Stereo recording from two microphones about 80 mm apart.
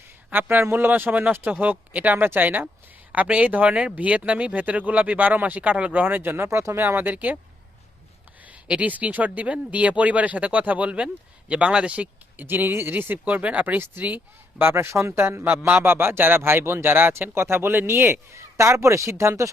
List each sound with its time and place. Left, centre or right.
0.3 s speech: right
6.8 s speech: right
8.6 s speech: centre; by 19.5 s right